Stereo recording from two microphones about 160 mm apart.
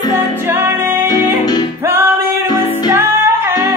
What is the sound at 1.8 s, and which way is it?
Music, 15° right (ahead or behind).